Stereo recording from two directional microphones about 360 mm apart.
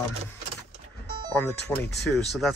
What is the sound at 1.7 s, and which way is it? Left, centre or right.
Speech, centre.